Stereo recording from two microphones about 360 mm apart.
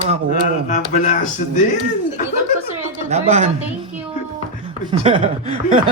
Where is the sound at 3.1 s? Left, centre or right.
Centre.